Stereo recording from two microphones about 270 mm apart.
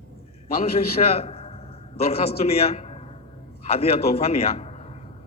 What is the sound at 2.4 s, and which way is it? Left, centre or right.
A man's voice, left.